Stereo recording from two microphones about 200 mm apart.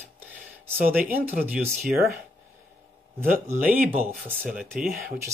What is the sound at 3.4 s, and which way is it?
Speech, 10° right (ahead or behind).